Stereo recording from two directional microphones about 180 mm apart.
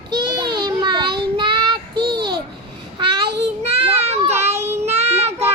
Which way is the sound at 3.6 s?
35° right (ahead or behind).